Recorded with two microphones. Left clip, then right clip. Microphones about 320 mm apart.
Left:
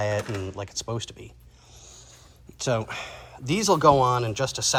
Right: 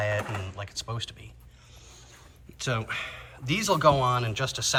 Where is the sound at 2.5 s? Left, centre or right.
Centre.